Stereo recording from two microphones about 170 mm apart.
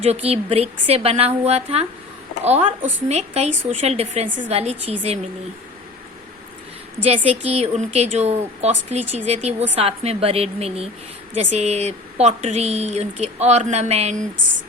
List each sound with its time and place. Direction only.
0.0 s a woman's voice: 35° right (ahead or behind)
7.3 s a woman's voice: 35° right (ahead or behind)